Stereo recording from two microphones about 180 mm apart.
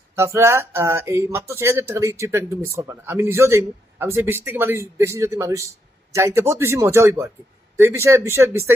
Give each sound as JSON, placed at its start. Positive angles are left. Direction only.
{"t": 0.2, "sound": "speech", "side_deg": -15}